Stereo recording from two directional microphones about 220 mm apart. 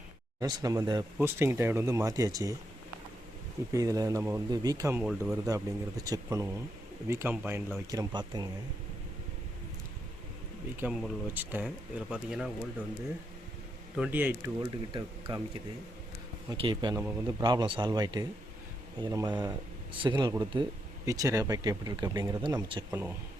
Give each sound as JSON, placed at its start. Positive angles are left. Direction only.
{"t": 0.3, "sound": "speech", "side_deg": -15}
{"t": 3.7, "sound": "speech", "side_deg": -15}
{"t": 10.8, "sound": "speech", "side_deg": -5}
{"t": 13.9, "sound": "speech", "side_deg": -5}
{"t": 16.5, "sound": "speech", "side_deg": -20}
{"t": 22.9, "sound": "speech", "side_deg": -10}